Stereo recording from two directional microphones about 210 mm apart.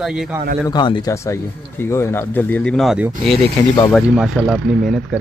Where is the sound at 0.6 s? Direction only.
20° left (ahead or behind).